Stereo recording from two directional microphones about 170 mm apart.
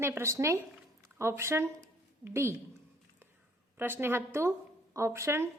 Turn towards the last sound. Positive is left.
turn(degrees=-15)  # may be behind; listen again after turning